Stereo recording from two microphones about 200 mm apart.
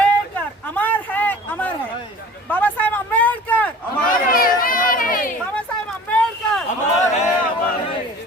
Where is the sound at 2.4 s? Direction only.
10° left (ahead or behind).